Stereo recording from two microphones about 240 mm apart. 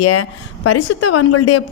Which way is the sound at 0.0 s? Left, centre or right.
Left.